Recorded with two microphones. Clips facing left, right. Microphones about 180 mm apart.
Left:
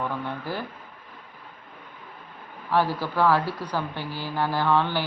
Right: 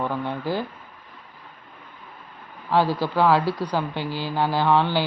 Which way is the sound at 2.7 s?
10° right (ahead or behind).